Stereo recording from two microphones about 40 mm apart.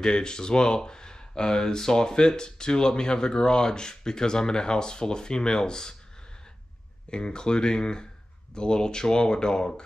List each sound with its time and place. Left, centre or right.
0.0 s speech: centre
7.1 s speech: left